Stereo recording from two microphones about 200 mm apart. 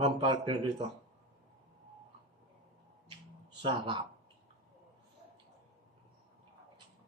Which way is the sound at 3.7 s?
25° right (ahead or behind).